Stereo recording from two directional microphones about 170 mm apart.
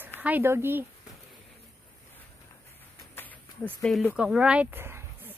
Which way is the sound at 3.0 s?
10° left (ahead or behind).